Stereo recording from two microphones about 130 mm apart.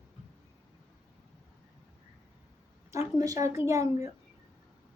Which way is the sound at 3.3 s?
25° right (ahead or behind).